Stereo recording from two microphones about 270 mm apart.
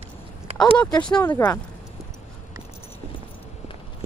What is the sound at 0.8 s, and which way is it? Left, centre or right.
Speech, centre.